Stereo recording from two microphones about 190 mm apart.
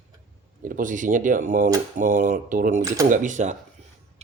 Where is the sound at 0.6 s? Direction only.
45° right (ahead or behind).